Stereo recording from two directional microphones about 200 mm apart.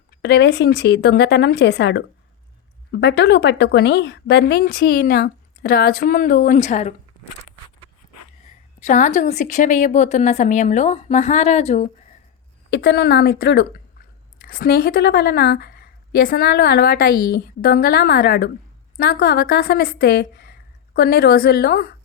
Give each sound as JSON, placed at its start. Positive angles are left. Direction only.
{"t": 0.2, "sound": "a woman's voice", "side_deg": 55}
{"t": 8.8, "sound": "a woman's voice", "side_deg": 40}
{"t": 12.7, "sound": "a woman's voice", "side_deg": 60}